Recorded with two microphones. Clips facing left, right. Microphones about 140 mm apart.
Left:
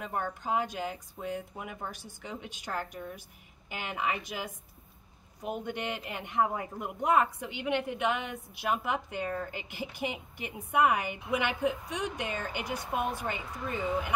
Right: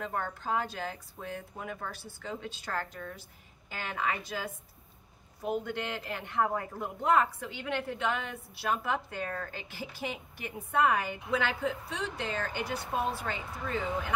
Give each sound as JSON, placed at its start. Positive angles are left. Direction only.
{"t": 0.0, "sound": "a man's voice", "side_deg": 15}